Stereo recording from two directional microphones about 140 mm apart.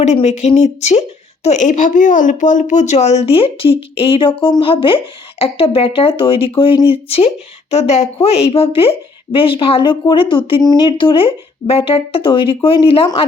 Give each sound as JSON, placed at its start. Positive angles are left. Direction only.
{"t": 0.0, "sound": "a woman's voice", "side_deg": 55}